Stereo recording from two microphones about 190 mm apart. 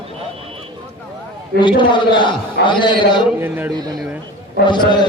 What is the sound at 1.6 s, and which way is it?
A man's voice, 25° left (ahead or behind).